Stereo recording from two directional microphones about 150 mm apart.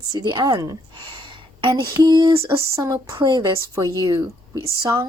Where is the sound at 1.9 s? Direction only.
25° right (ahead or behind).